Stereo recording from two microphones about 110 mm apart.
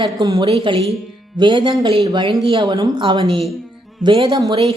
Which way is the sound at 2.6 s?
40° right (ahead or behind).